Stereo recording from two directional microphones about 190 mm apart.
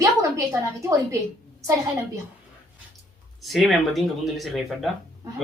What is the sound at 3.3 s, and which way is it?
Speech, centre (ahead or behind).